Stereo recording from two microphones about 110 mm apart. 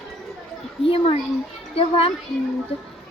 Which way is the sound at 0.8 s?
55° left (ahead or behind).